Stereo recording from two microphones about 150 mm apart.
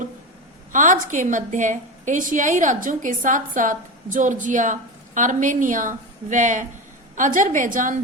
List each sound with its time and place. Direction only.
0.7 s a woman's voice: 60° right (ahead or behind)